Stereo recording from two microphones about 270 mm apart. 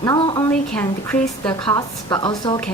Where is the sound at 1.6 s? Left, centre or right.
Centre.